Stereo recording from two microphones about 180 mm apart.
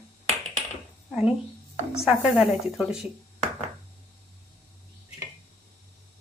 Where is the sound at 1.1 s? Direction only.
5° right (ahead or behind).